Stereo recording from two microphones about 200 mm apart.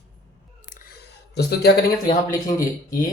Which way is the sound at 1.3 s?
55° left (ahead or behind).